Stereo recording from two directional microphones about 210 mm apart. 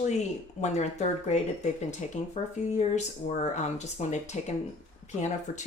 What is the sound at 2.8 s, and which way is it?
Speech, 35° left (ahead or behind).